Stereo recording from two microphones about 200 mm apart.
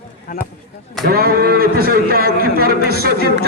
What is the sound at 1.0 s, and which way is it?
A man's voice, 50° right (ahead or behind).